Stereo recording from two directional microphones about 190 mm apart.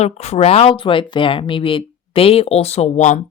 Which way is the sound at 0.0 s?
35° left (ahead or behind).